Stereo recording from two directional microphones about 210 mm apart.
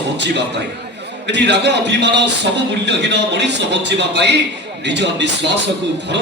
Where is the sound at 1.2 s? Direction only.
55° right (ahead or behind).